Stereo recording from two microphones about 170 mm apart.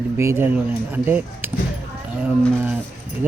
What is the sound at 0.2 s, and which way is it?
Speech, 15° right (ahead or behind).